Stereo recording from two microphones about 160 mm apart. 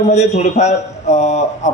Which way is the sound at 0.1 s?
45° left (ahead or behind).